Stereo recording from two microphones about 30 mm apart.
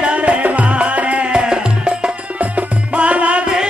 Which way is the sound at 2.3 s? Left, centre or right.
Right.